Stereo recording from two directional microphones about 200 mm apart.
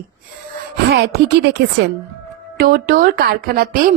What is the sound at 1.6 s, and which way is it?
A woman's voice, 55° right (ahead or behind).